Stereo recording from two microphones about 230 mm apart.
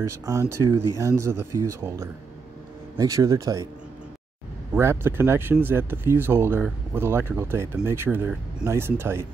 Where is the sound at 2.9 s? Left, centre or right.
Centre.